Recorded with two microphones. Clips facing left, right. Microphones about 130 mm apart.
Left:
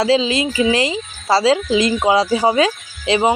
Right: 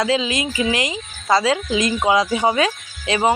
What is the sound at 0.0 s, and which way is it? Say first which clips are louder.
Speech: left 4 dB; 30° left (ahead or behind).